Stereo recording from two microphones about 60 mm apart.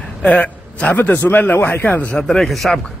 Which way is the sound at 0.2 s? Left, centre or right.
Left.